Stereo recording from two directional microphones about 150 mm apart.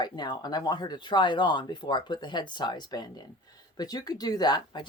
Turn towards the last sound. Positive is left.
turn(degrees=30)  # may be behind; listen again after turning